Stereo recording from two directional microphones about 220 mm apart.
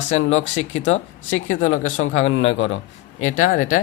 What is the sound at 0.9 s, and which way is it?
Speech, 30° left (ahead or behind).